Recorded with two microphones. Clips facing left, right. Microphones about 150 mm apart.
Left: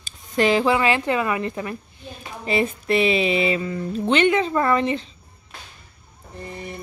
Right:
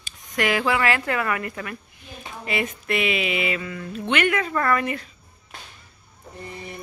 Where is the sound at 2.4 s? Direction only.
30° left (ahead or behind).